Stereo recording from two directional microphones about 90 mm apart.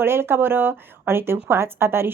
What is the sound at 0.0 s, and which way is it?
A woman's voice, 25° right (ahead or behind).